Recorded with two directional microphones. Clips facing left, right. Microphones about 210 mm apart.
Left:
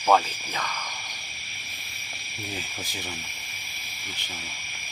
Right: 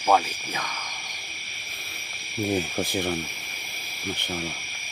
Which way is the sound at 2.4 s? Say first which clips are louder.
Right 12 dB; 60° right (ahead or behind).